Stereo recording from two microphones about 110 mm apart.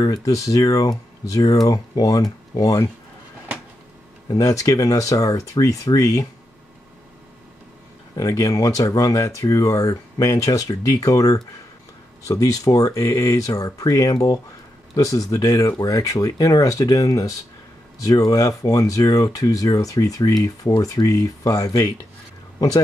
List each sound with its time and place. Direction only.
0.0 s speech: 35° left (ahead or behind)
4.3 s speech: 30° left (ahead or behind)
8.2 s speech: 30° left (ahead or behind)